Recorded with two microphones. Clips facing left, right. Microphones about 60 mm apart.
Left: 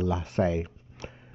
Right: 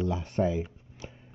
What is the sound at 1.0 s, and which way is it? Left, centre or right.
Sniff, left.